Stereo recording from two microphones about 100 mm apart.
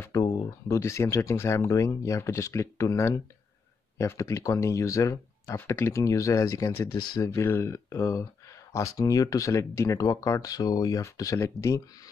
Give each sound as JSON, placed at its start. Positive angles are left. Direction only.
{"t": 0.1, "sound": "speech", "side_deg": 35}